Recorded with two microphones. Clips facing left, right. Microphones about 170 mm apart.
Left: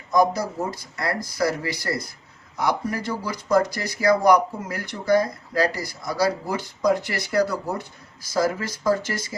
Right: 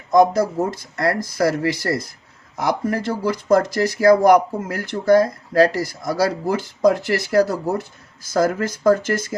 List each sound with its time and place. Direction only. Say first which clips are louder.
0.9 s speech: right 6 dB; 50° right (ahead or behind)